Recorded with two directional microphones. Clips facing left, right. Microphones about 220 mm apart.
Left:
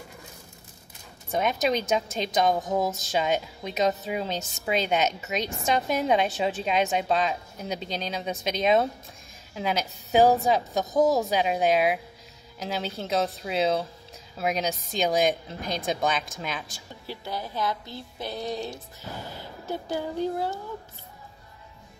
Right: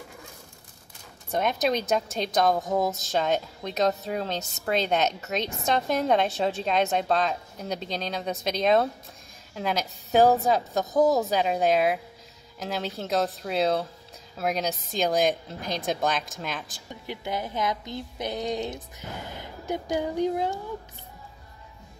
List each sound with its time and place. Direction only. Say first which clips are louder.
1.3 s a woman's voice: even; centre (ahead or behind)
17.0 s speech: right 3 dB; 20° right (ahead or behind)